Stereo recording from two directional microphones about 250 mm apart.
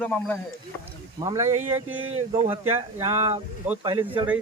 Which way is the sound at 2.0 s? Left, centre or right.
Right.